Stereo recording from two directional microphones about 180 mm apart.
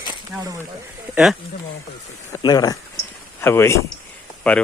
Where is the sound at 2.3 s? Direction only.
20° left (ahead or behind).